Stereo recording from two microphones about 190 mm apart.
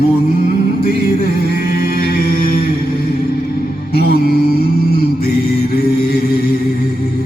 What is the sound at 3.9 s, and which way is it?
Music, 55° left (ahead or behind).